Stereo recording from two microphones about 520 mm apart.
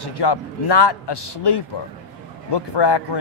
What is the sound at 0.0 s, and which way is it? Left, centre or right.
Speech, left.